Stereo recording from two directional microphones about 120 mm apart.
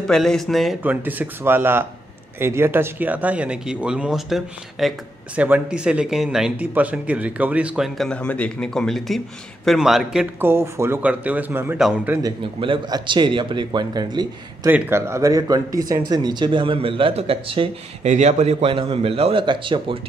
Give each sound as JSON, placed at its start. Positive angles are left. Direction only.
{"t": 0.0, "sound": "speech", "side_deg": 5}
{"t": 0.8, "sound": "speech", "side_deg": -15}
{"t": 5.3, "sound": "speech", "side_deg": -10}
{"t": 8.1, "sound": "speech", "side_deg": 10}
{"t": 10.4, "sound": "speech", "side_deg": -20}
{"t": 12.5, "sound": "speech", "side_deg": -45}
{"t": 14.7, "sound": "speech", "side_deg": -15}
{"t": 18.0, "sound": "a man's voice", "side_deg": -75}